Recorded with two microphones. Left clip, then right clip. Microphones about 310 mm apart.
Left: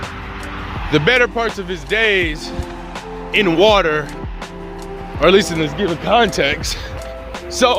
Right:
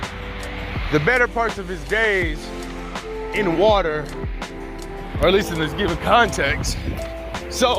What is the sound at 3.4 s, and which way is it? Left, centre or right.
Speech, left.